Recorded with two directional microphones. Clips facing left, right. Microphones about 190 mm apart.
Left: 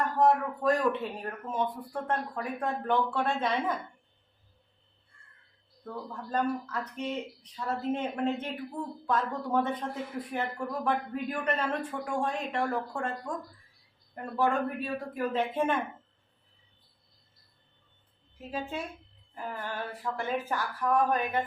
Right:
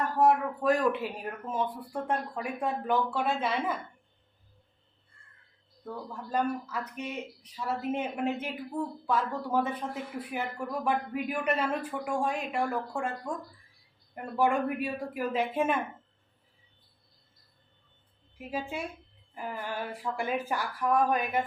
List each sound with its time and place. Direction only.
0.2 s speech: 5° right (ahead or behind)
5.8 s speech: 10° right (ahead or behind)
14.3 s speech: 10° right (ahead or behind)
18.3 s speech: 10° right (ahead or behind)